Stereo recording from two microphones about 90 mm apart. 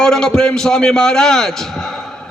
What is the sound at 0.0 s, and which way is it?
Speech, 5° left (ahead or behind).